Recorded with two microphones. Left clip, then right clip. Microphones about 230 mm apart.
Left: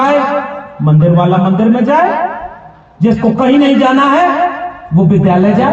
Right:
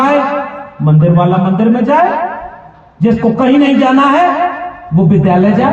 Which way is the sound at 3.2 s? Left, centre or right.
Left.